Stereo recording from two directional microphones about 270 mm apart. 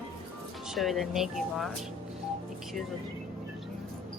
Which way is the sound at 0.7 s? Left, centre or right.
Centre.